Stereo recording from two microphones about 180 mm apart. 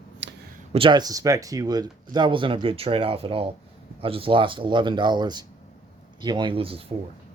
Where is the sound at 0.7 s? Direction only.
30° right (ahead or behind).